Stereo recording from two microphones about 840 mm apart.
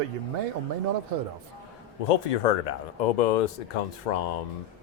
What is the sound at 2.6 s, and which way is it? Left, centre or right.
Speech, left.